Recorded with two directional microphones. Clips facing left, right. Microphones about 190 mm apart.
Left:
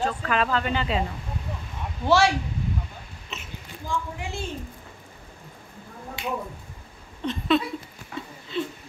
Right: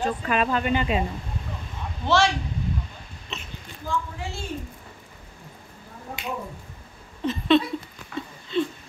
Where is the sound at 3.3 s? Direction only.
5° left (ahead or behind).